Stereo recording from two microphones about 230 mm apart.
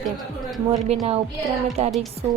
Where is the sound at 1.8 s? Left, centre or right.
Right.